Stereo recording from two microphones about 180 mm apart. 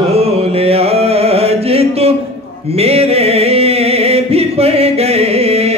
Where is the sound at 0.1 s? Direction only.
35° right (ahead or behind).